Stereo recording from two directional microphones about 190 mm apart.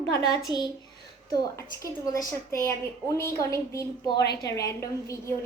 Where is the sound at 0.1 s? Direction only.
20° left (ahead or behind).